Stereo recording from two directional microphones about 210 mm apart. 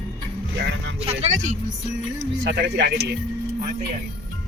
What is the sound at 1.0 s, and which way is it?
Speech, 30° right (ahead or behind).